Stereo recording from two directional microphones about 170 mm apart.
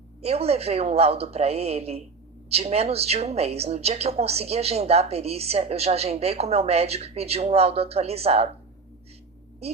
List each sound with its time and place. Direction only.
0.2 s a woman's voice: 35° right (ahead or behind)